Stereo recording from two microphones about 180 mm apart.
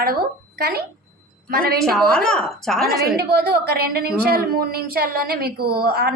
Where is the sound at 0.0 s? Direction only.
55° right (ahead or behind).